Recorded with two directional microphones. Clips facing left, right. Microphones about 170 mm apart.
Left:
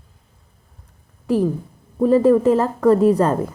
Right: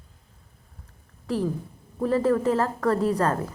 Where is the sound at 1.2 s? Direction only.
20° left (ahead or behind).